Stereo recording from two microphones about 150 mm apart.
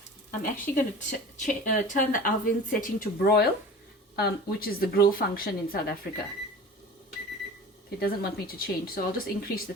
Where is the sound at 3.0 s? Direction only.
90° left.